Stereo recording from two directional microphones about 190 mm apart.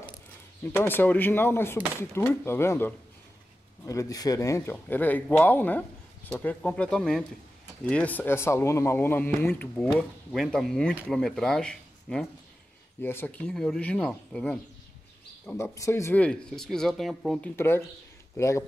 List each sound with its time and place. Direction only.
0.7 s a man's voice: 10° left (ahead or behind)
15.4 s a man's voice: 15° left (ahead or behind)
17.6 s speech: 10° left (ahead or behind)